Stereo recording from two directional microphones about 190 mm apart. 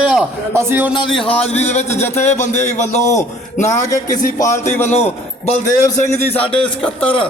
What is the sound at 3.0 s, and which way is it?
Speech, 15° left (ahead or behind).